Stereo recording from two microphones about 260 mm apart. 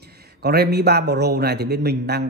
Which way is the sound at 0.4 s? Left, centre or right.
Right.